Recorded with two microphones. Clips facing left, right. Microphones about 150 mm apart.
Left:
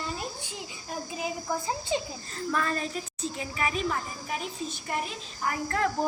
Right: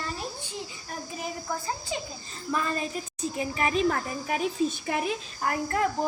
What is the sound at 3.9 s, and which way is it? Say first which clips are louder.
Speech: right 4 dB; 75° right (ahead or behind).